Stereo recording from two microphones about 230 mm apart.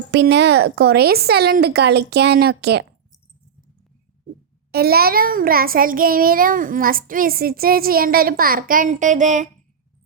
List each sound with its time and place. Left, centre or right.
0.1 s speech: right
4.7 s child singing: right